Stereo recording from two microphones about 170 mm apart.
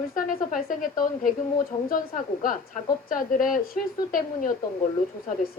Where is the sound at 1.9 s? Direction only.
55° left (ahead or behind).